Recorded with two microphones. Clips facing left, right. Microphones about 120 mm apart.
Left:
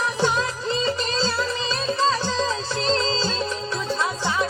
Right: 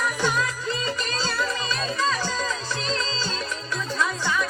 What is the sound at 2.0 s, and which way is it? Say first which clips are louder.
Music: left 4 dB; 30° left (ahead or behind).